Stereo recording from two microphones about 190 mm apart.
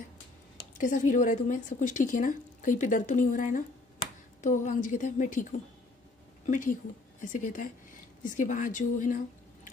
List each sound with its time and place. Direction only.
0.7 s a woman's voice: 45° left (ahead or behind)